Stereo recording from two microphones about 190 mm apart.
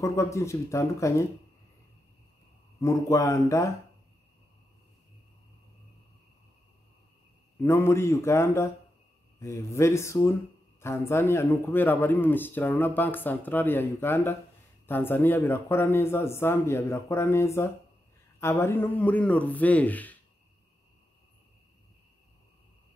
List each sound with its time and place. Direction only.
0.0 s a man's voice: 15° left (ahead or behind)
2.8 s a man's voice: 15° left (ahead or behind)
7.6 s a man's voice: 15° left (ahead or behind)